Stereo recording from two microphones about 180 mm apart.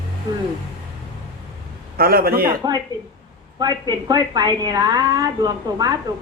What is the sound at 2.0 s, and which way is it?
Speech, 55° right (ahead or behind).